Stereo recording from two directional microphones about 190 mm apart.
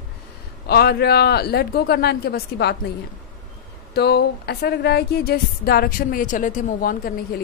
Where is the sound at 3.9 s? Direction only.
60° left (ahead or behind).